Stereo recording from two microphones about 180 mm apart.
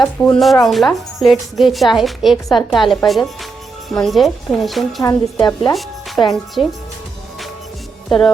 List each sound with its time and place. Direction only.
0.2 s a woman's voice: centre (ahead or behind)
5.0 s a woman's voice: 15° left (ahead or behind)
5.6 s speech: centre (ahead or behind)